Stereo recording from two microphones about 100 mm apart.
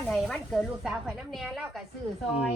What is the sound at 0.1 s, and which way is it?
Speech, centre (ahead or behind).